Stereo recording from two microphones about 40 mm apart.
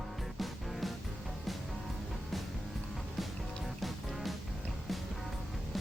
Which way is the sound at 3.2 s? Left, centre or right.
Centre.